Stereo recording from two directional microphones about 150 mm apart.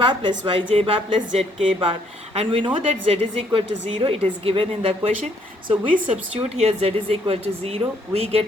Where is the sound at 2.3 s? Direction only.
35° right (ahead or behind).